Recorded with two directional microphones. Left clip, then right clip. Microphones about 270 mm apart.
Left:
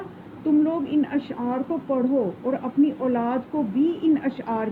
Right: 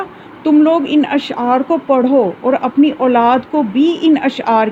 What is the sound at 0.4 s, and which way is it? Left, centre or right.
Speech, right.